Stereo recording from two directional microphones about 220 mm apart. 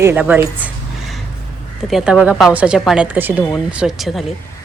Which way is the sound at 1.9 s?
5° right (ahead or behind).